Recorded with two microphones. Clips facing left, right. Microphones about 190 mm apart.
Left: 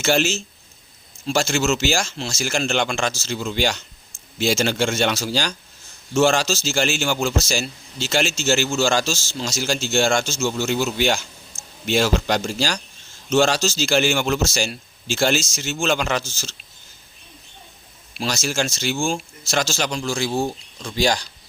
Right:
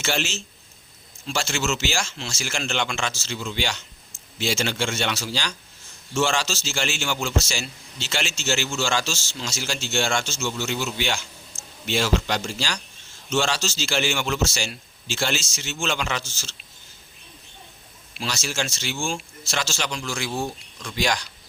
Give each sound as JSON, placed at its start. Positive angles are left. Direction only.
{"t": 0.0, "sound": "a man's voice", "side_deg": 40}
{"t": 18.2, "sound": "a man's voice", "side_deg": 45}